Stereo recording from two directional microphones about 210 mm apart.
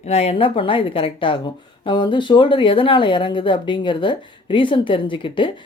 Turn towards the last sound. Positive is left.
turn(degrees=25)  # may be behind; listen again after turning